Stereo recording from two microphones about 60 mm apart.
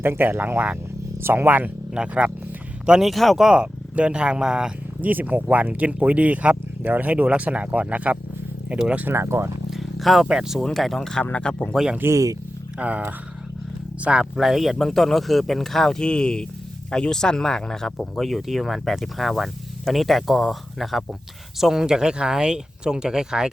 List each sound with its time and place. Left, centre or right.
0.0 s speech: right
2.0 s speech: centre
3.0 s speech: centre
3.4 s speech: centre
4.9 s speech: right
9.0 s speech: right
9.6 s a sound: centre
10.2 s speech: centre
10.6 s speech: centre
11.3 s speech: centre
12.0 s speech: right
12.8 s speech: right
14.3 s speech: centre